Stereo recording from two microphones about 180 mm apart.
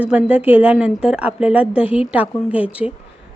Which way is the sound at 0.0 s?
10° right (ahead or behind).